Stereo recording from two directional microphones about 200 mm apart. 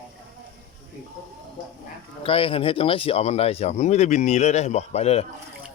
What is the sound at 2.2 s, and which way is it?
Speech, 25° left (ahead or behind).